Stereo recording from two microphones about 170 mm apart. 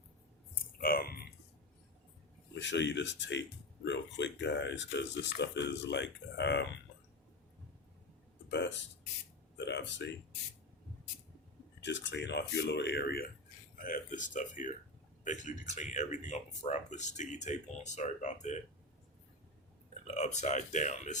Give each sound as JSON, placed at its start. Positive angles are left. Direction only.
{"t": 0.8, "sound": "a sound", "side_deg": 60}
{"t": 2.6, "sound": "speech", "side_deg": 90}
{"t": 8.4, "sound": "speech", "side_deg": 90}
{"t": 11.8, "sound": "speech", "side_deg": 90}
{"t": 13.8, "sound": "speech", "side_deg": 50}
{"t": 20.1, "sound": "speech", "side_deg": 45}